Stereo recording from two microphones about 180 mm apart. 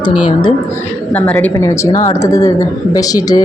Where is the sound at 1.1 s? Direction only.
10° left (ahead or behind).